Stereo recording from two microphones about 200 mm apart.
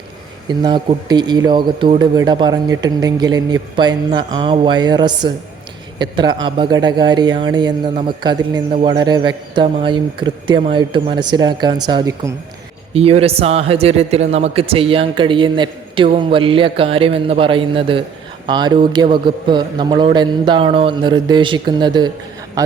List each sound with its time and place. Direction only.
0.4 s a man's voice: 20° right (ahead or behind)